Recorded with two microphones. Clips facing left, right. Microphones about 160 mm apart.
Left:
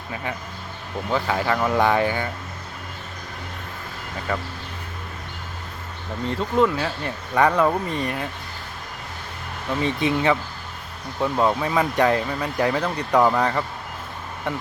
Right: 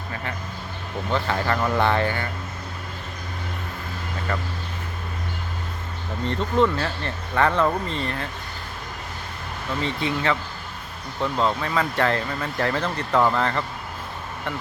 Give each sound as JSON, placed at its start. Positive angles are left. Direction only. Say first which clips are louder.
{"t": 1.1, "sound": "speech", "louder": "left 1 dB", "side_deg": 10}
{"t": 4.3, "sound": "speech", "louder": "left 2 dB", "side_deg": 10}
{"t": 6.2, "sound": "speech", "louder": "left 1 dB", "side_deg": 5}
{"t": 9.8, "sound": "speech", "louder": "left 4 dB", "side_deg": 15}